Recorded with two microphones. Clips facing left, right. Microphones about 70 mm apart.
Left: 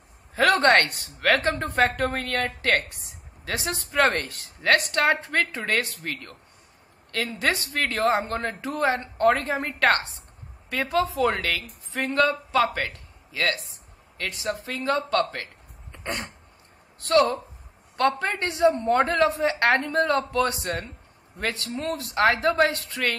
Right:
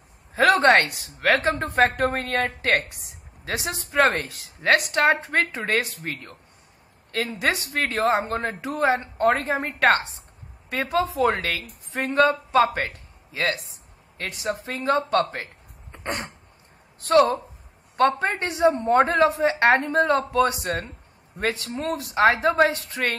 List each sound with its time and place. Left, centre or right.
0.3 s speech: centre
4.6 s speech: centre
7.3 s a woman's voice: centre
15.9 s throat clearing: right
17.1 s a woman's voice: right